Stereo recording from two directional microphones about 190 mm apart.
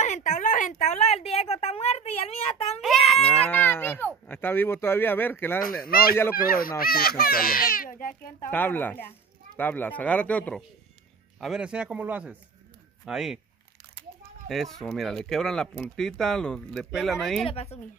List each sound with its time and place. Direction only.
0.0 s a sound: 40° left (ahead or behind)
2.8 s a sound: centre (ahead or behind)
5.6 s a child's voice: 50° left (ahead or behind)
8.5 s speech: 10° left (ahead or behind)
14.5 s speech: centre (ahead or behind)
17.5 s speech: 30° left (ahead or behind)